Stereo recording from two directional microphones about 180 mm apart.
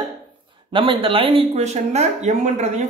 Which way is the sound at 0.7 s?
30° right (ahead or behind).